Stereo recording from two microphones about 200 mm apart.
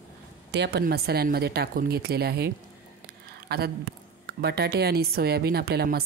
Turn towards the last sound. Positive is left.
turn(degrees=-50)  # may be behind; listen again after turning